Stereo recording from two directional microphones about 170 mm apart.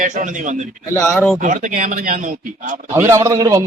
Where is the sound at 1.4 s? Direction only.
50° right (ahead or behind).